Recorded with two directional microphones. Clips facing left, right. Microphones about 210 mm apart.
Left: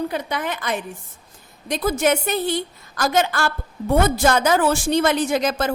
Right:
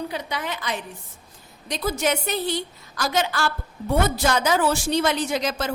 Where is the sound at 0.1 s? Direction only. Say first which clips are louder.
Left 4 dB; 55° left (ahead or behind).